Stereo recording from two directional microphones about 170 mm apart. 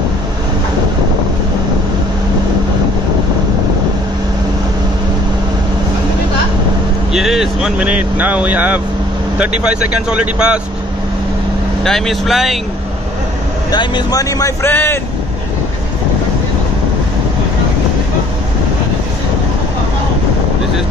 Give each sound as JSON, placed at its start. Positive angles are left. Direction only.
{"t": 7.1, "sound": "speech", "side_deg": 0}
{"t": 11.8, "sound": "speech", "side_deg": 0}
{"t": 13.7, "sound": "speech", "side_deg": 25}